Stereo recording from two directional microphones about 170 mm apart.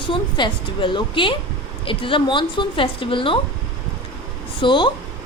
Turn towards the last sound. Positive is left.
turn(degrees=30)  # may be behind; listen again after turning